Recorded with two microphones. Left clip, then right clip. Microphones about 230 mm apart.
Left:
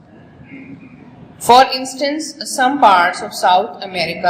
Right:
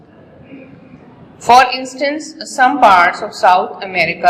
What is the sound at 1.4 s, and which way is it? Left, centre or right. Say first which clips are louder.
A woman's voice: right 1 dB; centre.